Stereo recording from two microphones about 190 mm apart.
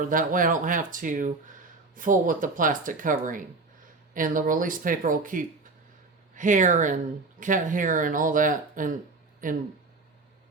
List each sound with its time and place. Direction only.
0.0 s speech: 45° right (ahead or behind)